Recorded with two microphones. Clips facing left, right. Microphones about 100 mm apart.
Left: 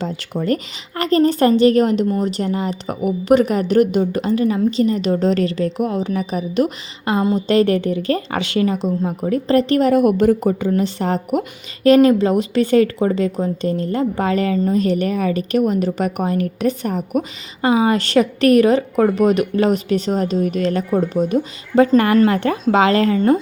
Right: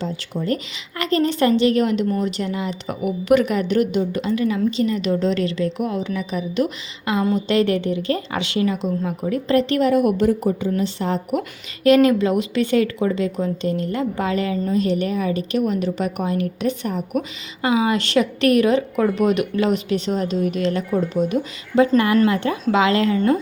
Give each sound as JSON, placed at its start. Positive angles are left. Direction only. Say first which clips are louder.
{"t": 0.0, "sound": "a woman's voice", "louder": "left 3 dB", "side_deg": 55}
{"t": 11.3, "sound": "a woman's voice", "louder": "left 3 dB", "side_deg": 35}